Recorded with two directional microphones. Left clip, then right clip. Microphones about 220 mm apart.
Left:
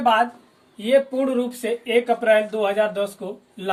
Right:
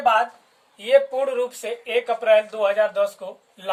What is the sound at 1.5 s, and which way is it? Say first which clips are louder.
Speech: left 3 dB; 30° right (ahead or behind).